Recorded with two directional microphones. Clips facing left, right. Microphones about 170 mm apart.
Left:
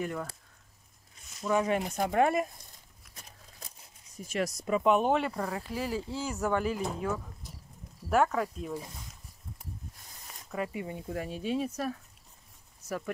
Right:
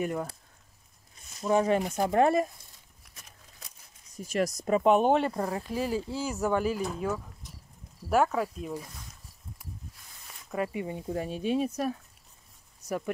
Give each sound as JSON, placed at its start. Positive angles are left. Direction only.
{"t": 0.0, "sound": "speech", "side_deg": -20}
{"t": 1.4, "sound": "speech", "side_deg": -35}
{"t": 4.3, "sound": "speech", "side_deg": -45}
{"t": 8.1, "sound": "speech", "side_deg": -10}
{"t": 10.5, "sound": "speech", "side_deg": -25}